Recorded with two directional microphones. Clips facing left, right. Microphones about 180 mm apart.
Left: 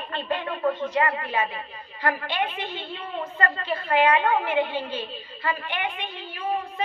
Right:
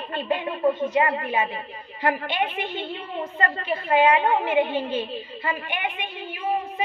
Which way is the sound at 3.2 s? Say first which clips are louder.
Right 1 dB; 25° right (ahead or behind).